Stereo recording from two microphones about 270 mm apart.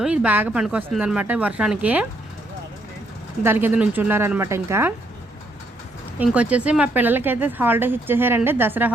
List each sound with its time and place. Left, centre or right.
0.0 s speech: centre
3.4 s speech: centre
6.1 s speech: centre